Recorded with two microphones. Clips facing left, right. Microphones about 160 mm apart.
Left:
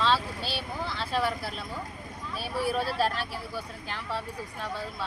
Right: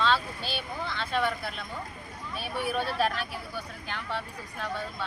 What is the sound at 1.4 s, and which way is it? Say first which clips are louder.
Speech: left 1 dB; 30° left (ahead or behind).